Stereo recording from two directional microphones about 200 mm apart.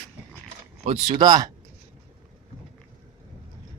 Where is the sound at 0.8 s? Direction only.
25° right (ahead or behind).